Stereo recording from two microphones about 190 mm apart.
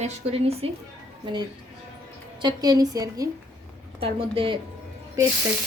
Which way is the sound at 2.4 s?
20° right (ahead or behind).